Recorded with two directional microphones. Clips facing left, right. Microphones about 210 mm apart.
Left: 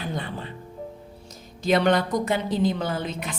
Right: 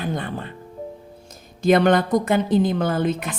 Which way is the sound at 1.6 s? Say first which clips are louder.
Right 4 dB; 50° right (ahead or behind).